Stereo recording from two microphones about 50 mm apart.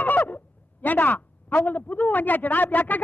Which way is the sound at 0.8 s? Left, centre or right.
Left.